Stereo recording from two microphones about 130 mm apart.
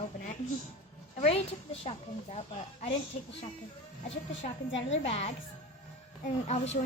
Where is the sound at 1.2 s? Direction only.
50° left (ahead or behind).